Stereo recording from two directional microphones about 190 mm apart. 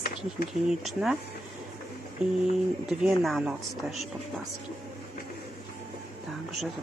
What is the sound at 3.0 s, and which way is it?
Speech, centre (ahead or behind).